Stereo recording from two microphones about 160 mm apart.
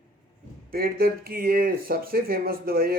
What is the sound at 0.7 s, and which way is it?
Speech, 70° right (ahead or behind).